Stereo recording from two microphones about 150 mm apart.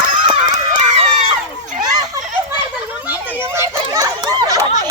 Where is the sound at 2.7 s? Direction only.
10° right (ahead or behind).